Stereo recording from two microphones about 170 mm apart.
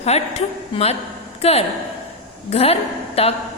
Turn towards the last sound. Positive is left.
turn(degrees=35)  # may be behind; listen again after turning